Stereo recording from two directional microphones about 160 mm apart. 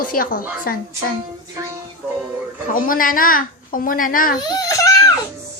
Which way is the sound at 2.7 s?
60° left (ahead or behind).